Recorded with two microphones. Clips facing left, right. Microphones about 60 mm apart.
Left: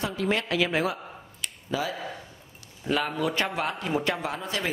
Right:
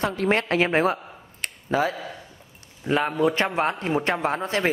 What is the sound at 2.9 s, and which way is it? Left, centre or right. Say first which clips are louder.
A man's voice: right 5 dB; right.